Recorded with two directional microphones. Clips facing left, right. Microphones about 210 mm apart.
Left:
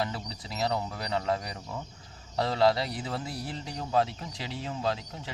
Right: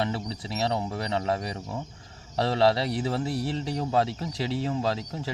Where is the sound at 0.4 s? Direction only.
25° right (ahead or behind).